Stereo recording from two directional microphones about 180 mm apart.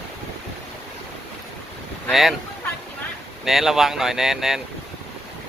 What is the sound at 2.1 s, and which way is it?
Speech, centre (ahead or behind).